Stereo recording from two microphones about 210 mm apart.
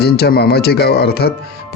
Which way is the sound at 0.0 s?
50° left (ahead or behind).